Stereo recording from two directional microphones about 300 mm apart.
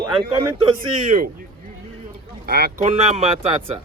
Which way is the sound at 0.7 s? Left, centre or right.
Right.